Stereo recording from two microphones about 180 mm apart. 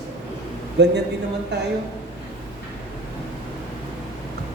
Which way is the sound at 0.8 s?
70° right (ahead or behind).